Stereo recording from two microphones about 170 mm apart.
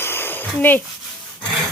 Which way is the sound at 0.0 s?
15° left (ahead or behind).